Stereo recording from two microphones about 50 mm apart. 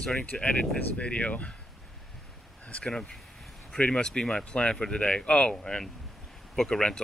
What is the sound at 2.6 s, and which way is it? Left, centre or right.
Speech, left.